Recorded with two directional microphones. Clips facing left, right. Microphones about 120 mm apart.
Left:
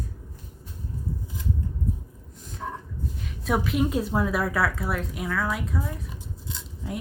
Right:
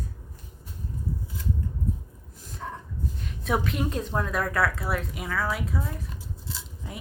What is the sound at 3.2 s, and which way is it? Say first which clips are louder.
A woman's voice: left 1 dB; centre (ahead or behind).